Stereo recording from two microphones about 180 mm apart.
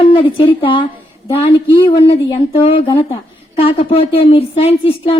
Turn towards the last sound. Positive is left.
turn(degrees=30)  # may be behind; listen again after turning